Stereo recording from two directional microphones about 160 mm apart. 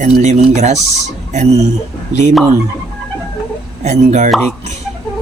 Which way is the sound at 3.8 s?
45° right (ahead or behind).